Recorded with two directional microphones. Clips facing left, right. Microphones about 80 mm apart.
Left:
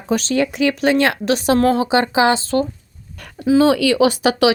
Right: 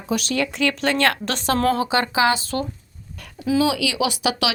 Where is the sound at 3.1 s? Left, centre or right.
Left.